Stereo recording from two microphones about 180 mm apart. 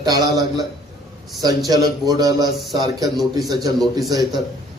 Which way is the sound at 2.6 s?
Centre (ahead or behind).